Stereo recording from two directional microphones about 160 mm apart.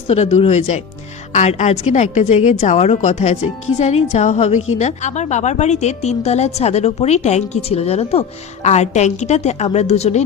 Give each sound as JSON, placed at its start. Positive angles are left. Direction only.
{"t": 0.1, "sound": "a woman's voice", "side_deg": 45}